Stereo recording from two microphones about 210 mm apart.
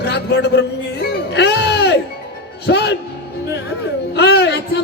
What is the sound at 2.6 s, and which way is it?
Music, 50° left (ahead or behind).